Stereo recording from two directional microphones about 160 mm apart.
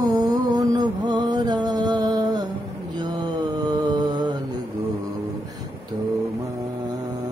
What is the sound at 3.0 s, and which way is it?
Mantra, 25° right (ahead or behind).